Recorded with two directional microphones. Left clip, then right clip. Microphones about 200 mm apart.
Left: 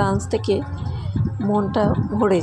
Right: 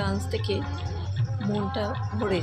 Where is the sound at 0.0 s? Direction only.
35° left (ahead or behind).